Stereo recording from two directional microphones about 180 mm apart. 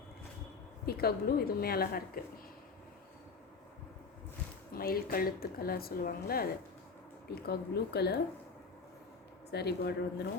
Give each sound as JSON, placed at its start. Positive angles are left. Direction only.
{"t": 0.9, "sound": "speech", "side_deg": 60}
{"t": 4.7, "sound": "speech", "side_deg": 55}
{"t": 9.5, "sound": "speech", "side_deg": 65}